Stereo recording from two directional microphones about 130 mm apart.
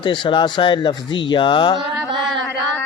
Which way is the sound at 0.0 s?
40° left (ahead or behind).